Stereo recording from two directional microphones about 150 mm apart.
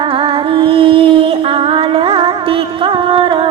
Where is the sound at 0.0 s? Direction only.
35° right (ahead or behind).